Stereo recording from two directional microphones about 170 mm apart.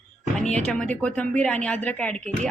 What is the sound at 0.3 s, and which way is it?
A woman's voice, 5° left (ahead or behind).